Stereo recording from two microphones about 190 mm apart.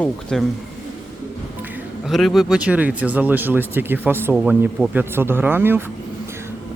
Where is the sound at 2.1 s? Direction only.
Centre (ahead or behind).